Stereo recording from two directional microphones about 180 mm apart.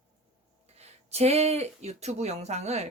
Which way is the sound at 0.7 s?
35° right (ahead or behind).